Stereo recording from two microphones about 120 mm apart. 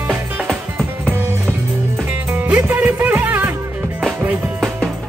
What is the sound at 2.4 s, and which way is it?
Music, 10° right (ahead or behind).